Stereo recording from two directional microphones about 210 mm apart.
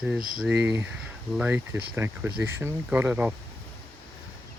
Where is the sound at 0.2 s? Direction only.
40° right (ahead or behind).